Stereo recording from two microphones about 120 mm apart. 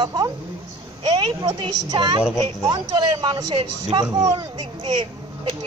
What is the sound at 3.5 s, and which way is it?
Speech, 50° right (ahead or behind).